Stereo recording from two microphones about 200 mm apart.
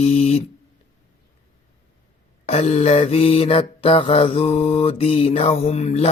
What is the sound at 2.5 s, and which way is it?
Mantra, 35° left (ahead or behind).